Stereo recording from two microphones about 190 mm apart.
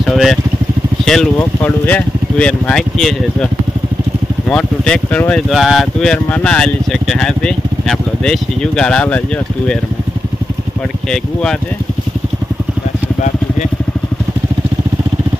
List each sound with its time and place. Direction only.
0.0 s speech: centre (ahead or behind)
4.5 s speech: 5° left (ahead or behind)